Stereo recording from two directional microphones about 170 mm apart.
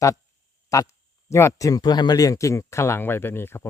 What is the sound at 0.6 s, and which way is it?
Speech, 20° left (ahead or behind).